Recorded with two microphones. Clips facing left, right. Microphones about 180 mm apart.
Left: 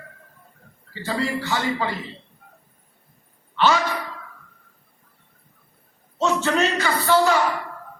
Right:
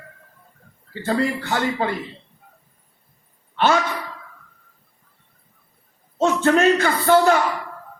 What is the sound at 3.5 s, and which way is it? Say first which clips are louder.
Speech: right 1 dB; 55° right (ahead or behind).